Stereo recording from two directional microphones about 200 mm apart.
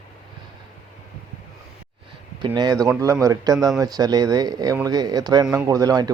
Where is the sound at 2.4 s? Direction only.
20° right (ahead or behind).